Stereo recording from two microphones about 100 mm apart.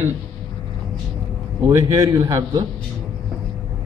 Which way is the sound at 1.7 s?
30° right (ahead or behind).